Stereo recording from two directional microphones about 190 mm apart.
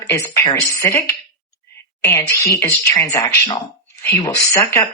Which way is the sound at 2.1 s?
15° left (ahead or behind).